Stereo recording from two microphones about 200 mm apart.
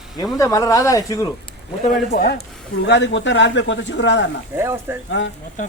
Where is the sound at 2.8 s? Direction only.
60° left (ahead or behind).